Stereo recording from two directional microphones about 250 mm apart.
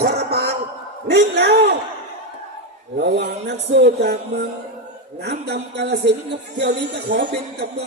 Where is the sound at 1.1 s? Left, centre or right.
Right.